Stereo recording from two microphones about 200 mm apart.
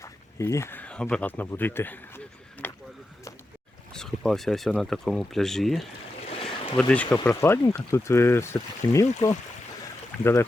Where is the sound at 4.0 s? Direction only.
Centre (ahead or behind).